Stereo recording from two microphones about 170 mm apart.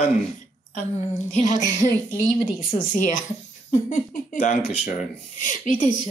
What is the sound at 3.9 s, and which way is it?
Speech, 50° left (ahead or behind).